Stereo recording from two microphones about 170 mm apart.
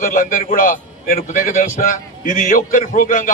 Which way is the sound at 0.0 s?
55° left (ahead or behind).